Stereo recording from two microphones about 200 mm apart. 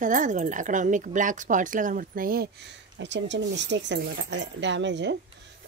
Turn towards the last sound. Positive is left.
turn(degrees=-65)  # may be behind; listen again after turning